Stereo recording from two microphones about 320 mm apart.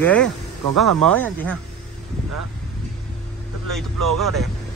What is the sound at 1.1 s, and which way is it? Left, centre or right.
Speech, centre.